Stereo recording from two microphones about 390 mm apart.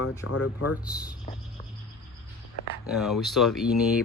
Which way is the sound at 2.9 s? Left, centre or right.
Centre.